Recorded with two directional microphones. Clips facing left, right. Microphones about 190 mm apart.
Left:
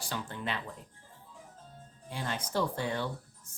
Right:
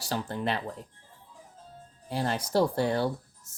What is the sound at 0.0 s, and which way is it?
Speech, 35° right (ahead or behind).